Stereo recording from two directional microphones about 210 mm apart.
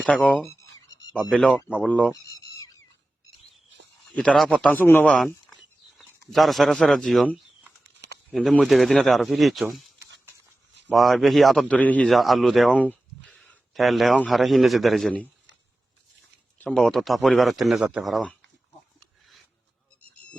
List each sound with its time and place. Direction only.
0.0 s a sound: 5° left (ahead or behind)
1.1 s speech: centre (ahead or behind)
4.1 s speech: 5° left (ahead or behind)
7.9 s a sound: 55° right (ahead or behind)
8.3 s speech: centre (ahead or behind)
10.8 s a man's voice: centre (ahead or behind)
16.6 s speech: 5° left (ahead or behind)